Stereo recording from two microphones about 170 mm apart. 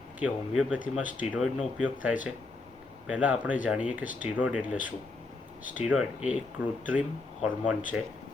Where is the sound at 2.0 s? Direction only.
10° right (ahead or behind).